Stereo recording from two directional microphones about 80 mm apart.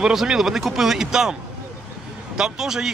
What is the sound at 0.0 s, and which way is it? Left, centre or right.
Speech, centre.